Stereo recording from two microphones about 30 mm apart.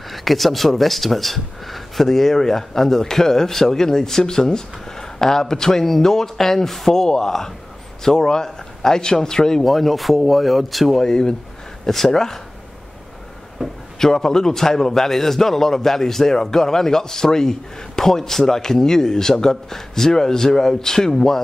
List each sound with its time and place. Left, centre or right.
0.1 s a man's voice: centre; by 9.6 s left
9.6 s speech: centre
11.0 s a man's voice: left
13.9 s a man's voice: centre